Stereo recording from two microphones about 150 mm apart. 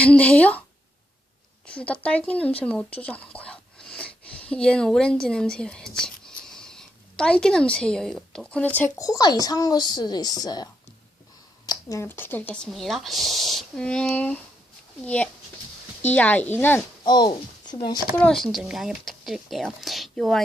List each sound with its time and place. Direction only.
0.0 s speech: 10° left (ahead or behind)
1.6 s speech: 10° left (ahead or behind)
9.0 s speech: 25° left (ahead or behind)
17.0 s speech: 30° left (ahead or behind)
18.2 s speech: 5° left (ahead or behind)